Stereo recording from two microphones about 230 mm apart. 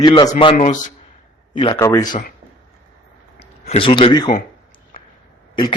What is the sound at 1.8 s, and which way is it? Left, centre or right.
Speech, centre.